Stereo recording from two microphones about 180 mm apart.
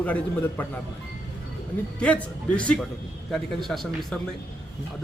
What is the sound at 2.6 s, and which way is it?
Speech, 5° left (ahead or behind).